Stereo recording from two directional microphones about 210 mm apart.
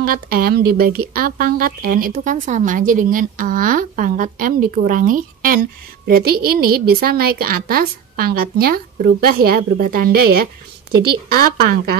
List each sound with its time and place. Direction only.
0.0 s a woman's voice: 45° right (ahead or behind)